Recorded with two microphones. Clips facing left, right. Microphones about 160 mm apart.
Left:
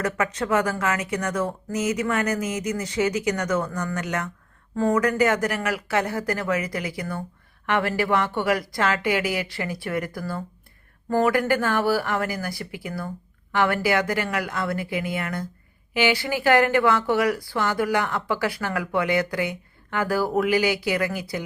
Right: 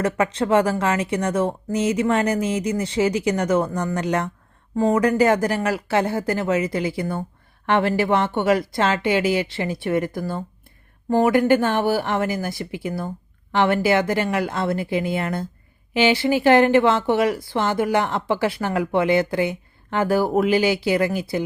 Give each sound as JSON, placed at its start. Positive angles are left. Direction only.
{"t": 0.0, "sound": "speech", "side_deg": -30}